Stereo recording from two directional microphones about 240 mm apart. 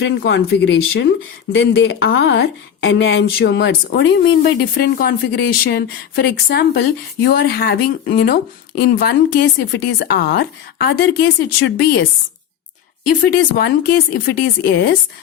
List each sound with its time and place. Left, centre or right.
0.0 s a woman's voice: left
13.2 s a woman's voice: left